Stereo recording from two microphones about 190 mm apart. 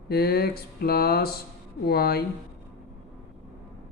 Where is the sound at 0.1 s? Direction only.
55° left (ahead or behind).